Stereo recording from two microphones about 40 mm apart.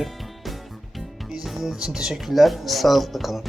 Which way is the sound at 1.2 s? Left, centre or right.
Centre.